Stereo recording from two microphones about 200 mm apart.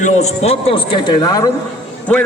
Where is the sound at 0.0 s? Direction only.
35° left (ahead or behind); by 1.5 s 20° left (ahead or behind).